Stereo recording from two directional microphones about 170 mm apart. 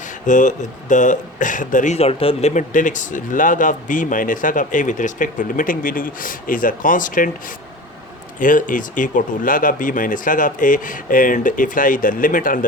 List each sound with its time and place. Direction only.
0.3 s speech: 45° left (ahead or behind)
8.4 s speech: 50° left (ahead or behind)